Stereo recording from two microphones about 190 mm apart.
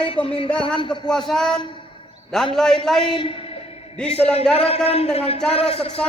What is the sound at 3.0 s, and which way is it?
A woman's voice, 25° left (ahead or behind).